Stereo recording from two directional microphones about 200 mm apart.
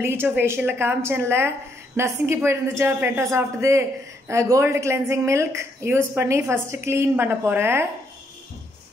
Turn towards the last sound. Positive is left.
turn(degrees=-10)  # may be behind; listen again after turning